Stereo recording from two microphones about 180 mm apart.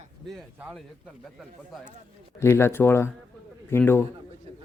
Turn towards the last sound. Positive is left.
turn(degrees=15)  # may be behind; listen again after turning